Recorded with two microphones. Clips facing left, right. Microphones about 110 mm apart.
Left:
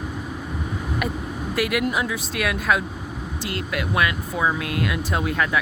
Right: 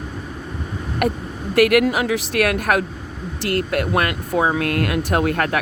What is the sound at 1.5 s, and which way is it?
Speech, 60° right (ahead or behind).